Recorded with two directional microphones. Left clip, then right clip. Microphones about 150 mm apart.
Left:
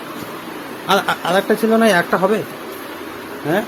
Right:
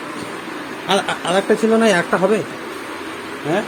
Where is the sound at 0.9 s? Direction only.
15° left (ahead or behind).